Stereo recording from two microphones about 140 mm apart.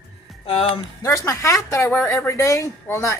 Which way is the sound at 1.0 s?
20° left (ahead or behind).